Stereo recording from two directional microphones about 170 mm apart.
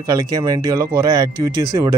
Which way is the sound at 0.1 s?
20° right (ahead or behind).